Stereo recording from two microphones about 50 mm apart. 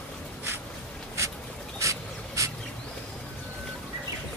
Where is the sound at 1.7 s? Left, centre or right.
Right.